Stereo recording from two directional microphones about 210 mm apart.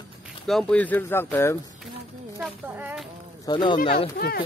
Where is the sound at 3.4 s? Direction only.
20° left (ahead or behind).